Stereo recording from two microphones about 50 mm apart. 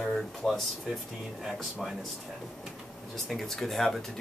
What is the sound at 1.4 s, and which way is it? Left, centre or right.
Speech, centre.